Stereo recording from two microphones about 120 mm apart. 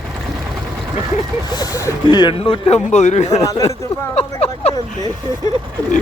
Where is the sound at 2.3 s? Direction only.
55° left (ahead or behind); by 3.4 s 75° left (ahead or behind).